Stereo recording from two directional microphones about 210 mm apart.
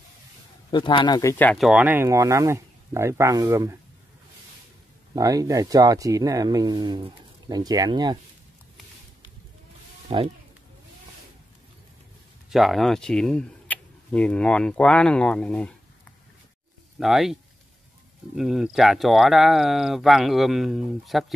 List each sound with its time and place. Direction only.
0.7 s speech: 20° left (ahead or behind)
1.4 s speech: centre (ahead or behind); by 3.7 s 15° right (ahead or behind)
5.1 s speech: 15° right (ahead or behind)
10.0 s speech: 25° right (ahead or behind)
12.4 s speech: centre (ahead or behind)
17.0 s speech: centre (ahead or behind)